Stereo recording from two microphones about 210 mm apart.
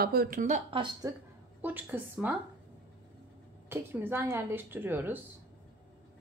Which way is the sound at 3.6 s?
10° right (ahead or behind).